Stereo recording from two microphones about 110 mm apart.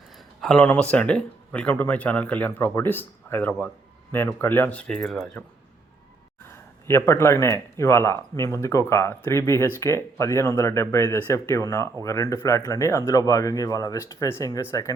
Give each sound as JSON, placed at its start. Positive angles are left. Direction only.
{"t": 0.4, "sound": "speech", "side_deg": 10}
{"t": 6.5, "sound": "speech", "side_deg": 20}